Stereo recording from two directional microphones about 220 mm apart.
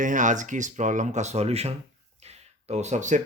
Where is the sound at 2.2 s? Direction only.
30° right (ahead or behind).